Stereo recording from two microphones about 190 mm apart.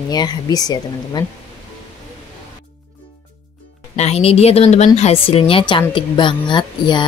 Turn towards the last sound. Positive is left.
turn(degrees=25)  # may be behind; listen again after turning